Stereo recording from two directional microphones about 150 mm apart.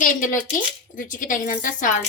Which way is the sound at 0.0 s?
60° left (ahead or behind).